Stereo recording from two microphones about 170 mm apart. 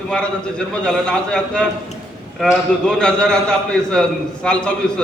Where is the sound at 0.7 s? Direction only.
5° left (ahead or behind).